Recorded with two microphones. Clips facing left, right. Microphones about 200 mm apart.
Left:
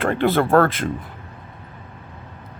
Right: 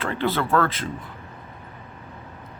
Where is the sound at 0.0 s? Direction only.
50° left (ahead or behind).